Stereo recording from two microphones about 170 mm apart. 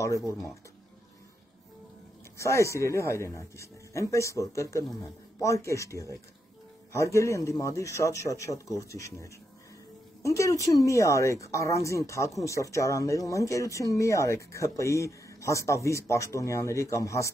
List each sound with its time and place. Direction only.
2.3 s speech: 15° left (ahead or behind)